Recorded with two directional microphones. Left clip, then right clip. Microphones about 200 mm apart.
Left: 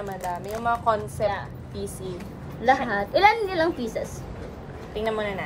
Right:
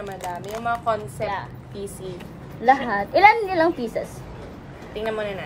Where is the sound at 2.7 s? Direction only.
15° right (ahead or behind).